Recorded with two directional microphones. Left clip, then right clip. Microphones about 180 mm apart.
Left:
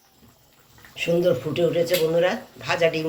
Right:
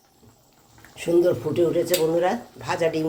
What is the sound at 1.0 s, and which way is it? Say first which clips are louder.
Speech: right 1 dB; 55° right (ahead or behind).